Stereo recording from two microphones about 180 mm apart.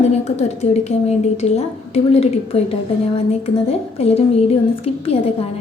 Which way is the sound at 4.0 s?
35° left (ahead or behind).